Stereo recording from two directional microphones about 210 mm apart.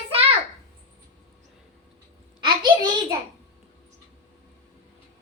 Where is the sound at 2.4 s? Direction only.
20° right (ahead or behind).